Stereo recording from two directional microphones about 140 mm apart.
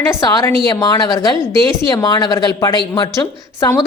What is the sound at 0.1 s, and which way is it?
Speech, 30° left (ahead or behind).